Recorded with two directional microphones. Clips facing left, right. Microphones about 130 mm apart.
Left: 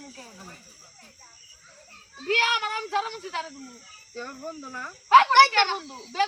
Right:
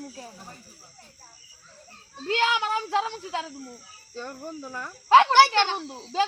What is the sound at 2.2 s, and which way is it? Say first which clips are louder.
Speech: right 2 dB; 25° right (ahead or behind).